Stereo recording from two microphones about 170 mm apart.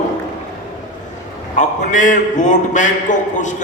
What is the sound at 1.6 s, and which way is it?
A man's voice, 45° left (ahead or behind).